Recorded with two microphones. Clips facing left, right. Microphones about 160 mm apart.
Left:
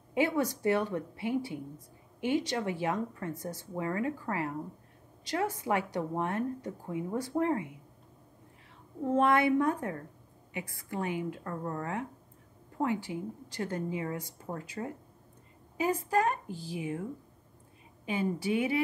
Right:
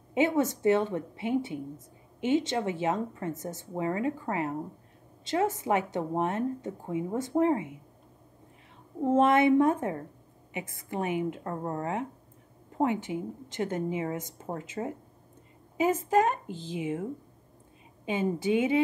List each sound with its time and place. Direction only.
0.4 s speech: 25° right (ahead or behind)
9.0 s speech: 25° right (ahead or behind)
18.0 s speech: 20° right (ahead or behind)